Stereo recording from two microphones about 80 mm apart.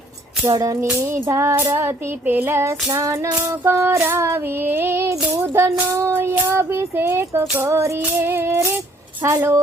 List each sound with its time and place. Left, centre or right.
0.4 s music: right
0.8 s music: right
1.7 s child singing: right
2.9 s music: right
4.0 s child singing: right
5.4 s music: right